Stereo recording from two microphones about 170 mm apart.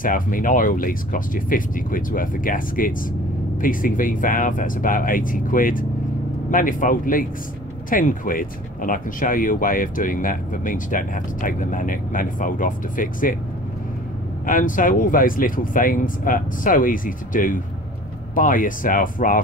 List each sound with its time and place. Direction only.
0.0 s speech: 55° left (ahead or behind)
14.4 s speech: 55° left (ahead or behind)